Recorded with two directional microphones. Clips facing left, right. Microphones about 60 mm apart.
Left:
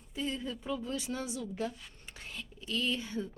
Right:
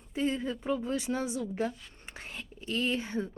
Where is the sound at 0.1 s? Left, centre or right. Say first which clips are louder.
Right 6 dB; right.